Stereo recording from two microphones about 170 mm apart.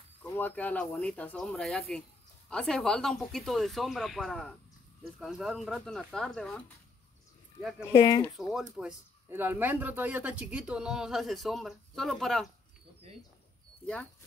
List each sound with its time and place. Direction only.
0.2 s speech: 10° left (ahead or behind)
7.9 s speech: 25° left (ahead or behind)
8.4 s speech: centre (ahead or behind)